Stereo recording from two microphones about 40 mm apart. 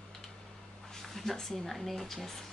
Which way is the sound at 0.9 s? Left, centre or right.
Centre.